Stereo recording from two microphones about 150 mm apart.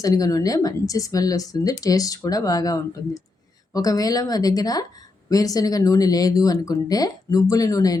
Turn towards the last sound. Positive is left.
turn(degrees=25)  # may be behind; listen again after turning